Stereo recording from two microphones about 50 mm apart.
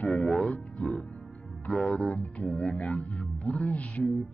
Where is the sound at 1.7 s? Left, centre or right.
Left.